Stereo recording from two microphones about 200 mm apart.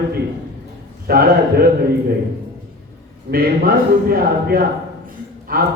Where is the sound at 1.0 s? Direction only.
50° right (ahead or behind).